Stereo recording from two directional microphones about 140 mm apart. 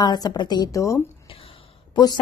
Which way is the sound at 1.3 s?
40° left (ahead or behind).